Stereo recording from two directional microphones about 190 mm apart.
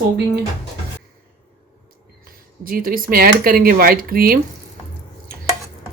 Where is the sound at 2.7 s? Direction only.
50° right (ahead or behind).